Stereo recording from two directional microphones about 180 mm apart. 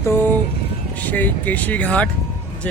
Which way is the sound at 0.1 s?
10° left (ahead or behind).